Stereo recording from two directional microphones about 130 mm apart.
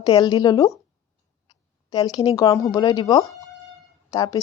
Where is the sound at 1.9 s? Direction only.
30° left (ahead or behind).